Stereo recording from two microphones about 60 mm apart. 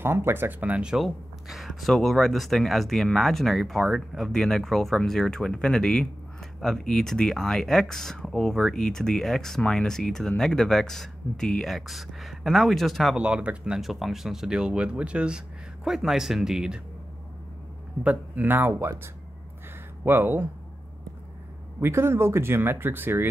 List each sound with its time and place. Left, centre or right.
0.0 s speech: right
0.9 s speech: centre
4.3 s speech: centre
13.1 s speech: centre
13.7 s speech: centre
15.8 s speech: centre
18.0 s speech: right
20.1 s speech: right
21.7 s speech: right